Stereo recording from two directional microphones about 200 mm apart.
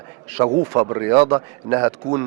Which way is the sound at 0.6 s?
20° right (ahead or behind).